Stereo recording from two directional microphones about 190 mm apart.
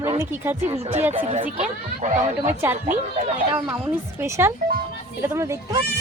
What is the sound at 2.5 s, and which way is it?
Speech, 10° right (ahead or behind).